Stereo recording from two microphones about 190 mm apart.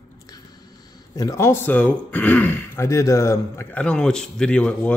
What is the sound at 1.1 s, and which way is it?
Speech, 15° left (ahead or behind).